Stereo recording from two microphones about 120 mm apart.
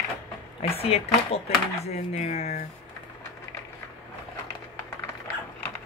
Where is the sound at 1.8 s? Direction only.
65° left (ahead or behind).